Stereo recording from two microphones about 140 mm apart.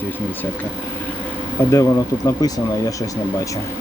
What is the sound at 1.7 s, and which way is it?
Speech, 25° left (ahead or behind).